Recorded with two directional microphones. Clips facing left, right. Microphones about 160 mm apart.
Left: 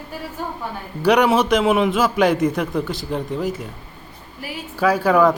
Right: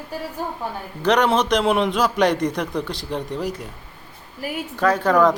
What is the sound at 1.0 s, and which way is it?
A man's voice, 10° left (ahead or behind).